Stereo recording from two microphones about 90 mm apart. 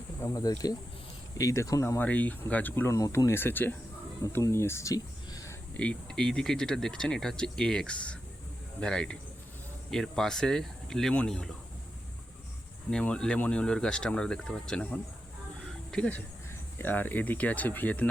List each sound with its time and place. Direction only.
0.3 s speech: 40° left (ahead or behind)
2.0 s speech: 15° left (ahead or behind)
2.9 s speech: 40° left (ahead or behind); by 3.8 s 20° left (ahead or behind)
4.2 s speech: 35° left (ahead or behind)
5.3 s a sound: 40° left (ahead or behind)
5.7 s speech: 15° left (ahead or behind)
12.9 s speech: 10° left (ahead or behind)
15.6 s a sound: 10° left (ahead or behind)
16.7 s speech: 20° left (ahead or behind)